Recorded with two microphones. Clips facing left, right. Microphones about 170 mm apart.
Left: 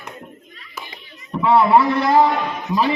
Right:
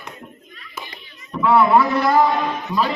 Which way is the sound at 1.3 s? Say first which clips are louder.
Left 1 dB; 25° left (ahead or behind).